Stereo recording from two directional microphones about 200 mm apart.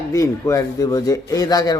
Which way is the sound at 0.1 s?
15° left (ahead or behind).